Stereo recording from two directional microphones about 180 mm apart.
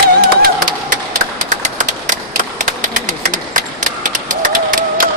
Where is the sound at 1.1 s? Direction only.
45° right (ahead or behind).